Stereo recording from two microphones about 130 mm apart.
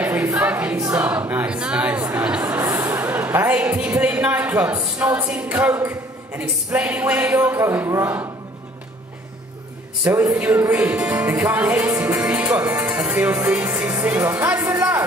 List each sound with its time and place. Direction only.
0.0 s choir: 15° right (ahead or behind)
0.9 s speech: 10° right (ahead or behind)
2.0 s a sound: 10° right (ahead or behind)
2.5 s music: 15° right (ahead or behind)
4.0 s speech: 10° right (ahead or behind)
5.8 s a sound: 20° right (ahead or behind)
6.4 s speech: 10° right (ahead or behind)
10.1 s music: 25° right (ahead or behind)
10.4 s speech: 15° right (ahead or behind)
11.2 s music: 15° right (ahead or behind)
12.4 s speech: 25° right (ahead or behind)
12.7 s speech: 10° right (ahead or behind)